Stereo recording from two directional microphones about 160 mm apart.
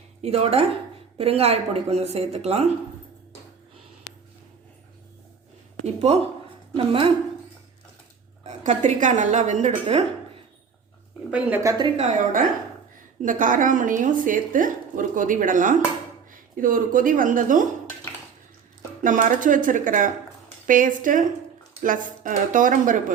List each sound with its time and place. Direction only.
0.2 s a woman's voice: 40° right (ahead or behind)
5.8 s a woman's voice: 40° right (ahead or behind)
8.4 s a woman's voice: 50° right (ahead or behind)
11.3 s speech: 10° right (ahead or behind)
11.6 s speech: 20° right (ahead or behind)
11.9 s a woman's voice: 55° right (ahead or behind)
19.0 s speech: 55° right (ahead or behind)